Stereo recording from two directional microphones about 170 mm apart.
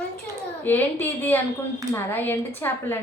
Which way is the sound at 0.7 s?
10° left (ahead or behind).